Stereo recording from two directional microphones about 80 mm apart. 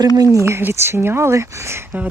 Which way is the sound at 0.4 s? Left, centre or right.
Right.